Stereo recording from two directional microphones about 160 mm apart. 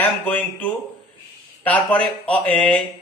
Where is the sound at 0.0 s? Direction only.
10° left (ahead or behind).